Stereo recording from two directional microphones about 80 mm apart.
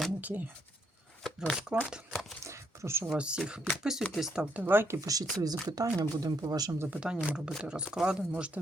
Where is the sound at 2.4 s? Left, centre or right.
Right.